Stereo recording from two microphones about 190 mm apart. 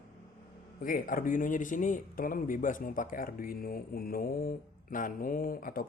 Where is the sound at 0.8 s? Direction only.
50° left (ahead or behind).